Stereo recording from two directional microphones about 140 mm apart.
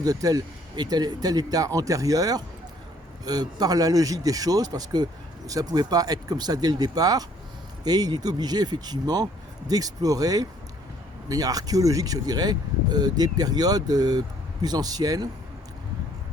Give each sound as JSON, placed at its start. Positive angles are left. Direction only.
{"t": 0.0, "sound": "speech", "side_deg": -25}